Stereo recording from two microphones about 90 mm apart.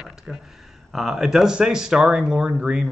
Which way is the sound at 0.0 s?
5° right (ahead or behind).